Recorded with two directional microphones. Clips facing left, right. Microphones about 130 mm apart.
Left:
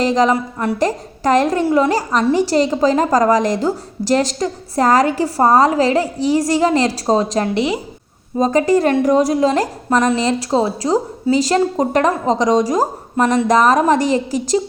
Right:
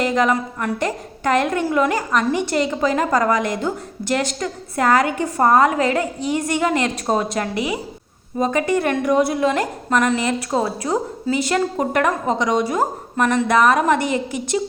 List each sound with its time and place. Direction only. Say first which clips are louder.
0.0 s a woman's voice: left 4 dB; 35° left (ahead or behind)
12.4 s a woman's voice: left 5 dB; 40° left (ahead or behind)